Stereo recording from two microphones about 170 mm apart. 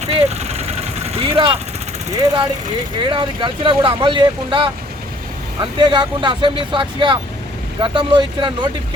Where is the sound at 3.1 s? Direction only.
30° right (ahead or behind).